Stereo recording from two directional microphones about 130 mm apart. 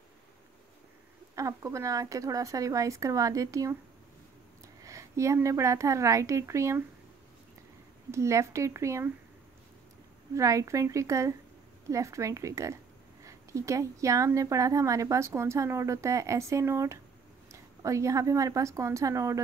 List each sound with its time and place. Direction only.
1.3 s a woman's voice: 25° right (ahead or behind)
4.8 s a woman's voice: 25° right (ahead or behind)
8.1 s a woman's voice: 20° right (ahead or behind)
10.3 s a woman's voice: 25° right (ahead or behind)